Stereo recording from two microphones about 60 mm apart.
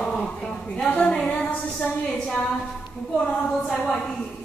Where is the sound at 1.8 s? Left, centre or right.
Centre.